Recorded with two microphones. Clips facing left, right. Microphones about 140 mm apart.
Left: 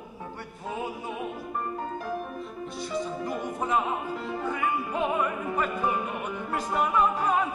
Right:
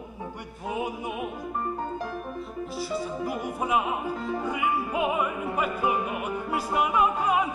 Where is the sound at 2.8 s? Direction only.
5° right (ahead or behind).